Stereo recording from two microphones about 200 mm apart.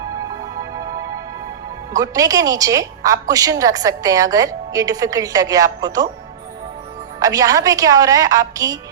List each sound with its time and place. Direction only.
1.9 s a woman's voice: 15° right (ahead or behind)
7.2 s a woman's voice: 15° right (ahead or behind)